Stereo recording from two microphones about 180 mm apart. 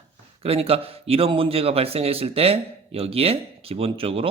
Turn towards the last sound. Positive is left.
turn(degrees=-30)  # may be behind; listen again after turning